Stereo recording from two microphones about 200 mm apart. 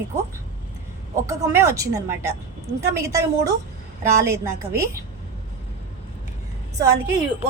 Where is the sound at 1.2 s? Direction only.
15° right (ahead or behind).